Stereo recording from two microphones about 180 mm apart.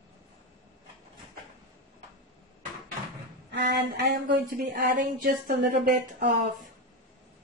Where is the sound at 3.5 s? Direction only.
60° right (ahead or behind).